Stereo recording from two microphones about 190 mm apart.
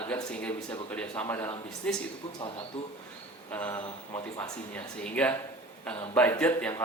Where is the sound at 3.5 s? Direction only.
10° left (ahead or behind).